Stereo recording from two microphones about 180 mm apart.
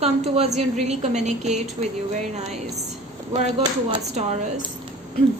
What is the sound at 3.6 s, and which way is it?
Speech, 20° right (ahead or behind).